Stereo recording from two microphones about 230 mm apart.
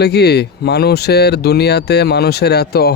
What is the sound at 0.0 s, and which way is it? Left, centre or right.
Speech, left.